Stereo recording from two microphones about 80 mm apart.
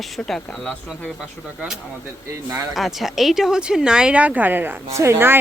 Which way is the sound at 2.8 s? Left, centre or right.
Centre.